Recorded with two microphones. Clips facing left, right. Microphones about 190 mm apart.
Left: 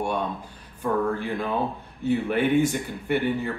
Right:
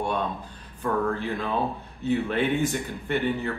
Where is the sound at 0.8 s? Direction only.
10° left (ahead or behind).